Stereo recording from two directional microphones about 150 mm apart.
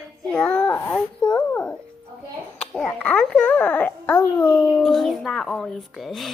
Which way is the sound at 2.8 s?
5° left (ahead or behind).